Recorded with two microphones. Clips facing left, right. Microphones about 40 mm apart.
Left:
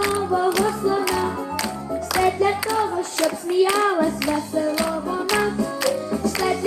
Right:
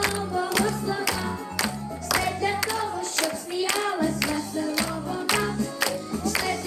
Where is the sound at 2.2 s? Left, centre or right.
Centre.